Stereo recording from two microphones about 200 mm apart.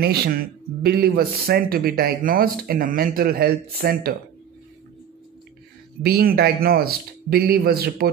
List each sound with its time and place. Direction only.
0.0 s speech: 50° right (ahead or behind)
6.0 s speech: 50° right (ahead or behind)